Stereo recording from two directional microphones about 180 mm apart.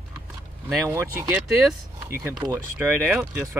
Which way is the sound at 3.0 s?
15° right (ahead or behind).